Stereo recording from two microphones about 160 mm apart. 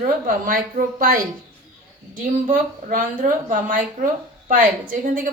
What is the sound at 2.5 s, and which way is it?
A woman's voice, 55° right (ahead or behind).